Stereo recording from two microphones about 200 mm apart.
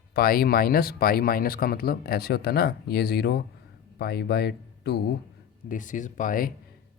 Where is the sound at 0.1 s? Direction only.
50° left (ahead or behind).